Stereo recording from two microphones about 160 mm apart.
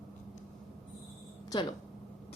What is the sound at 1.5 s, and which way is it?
Speech, 30° left (ahead or behind).